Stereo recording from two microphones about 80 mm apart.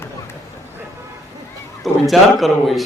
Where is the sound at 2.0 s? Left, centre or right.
Centre.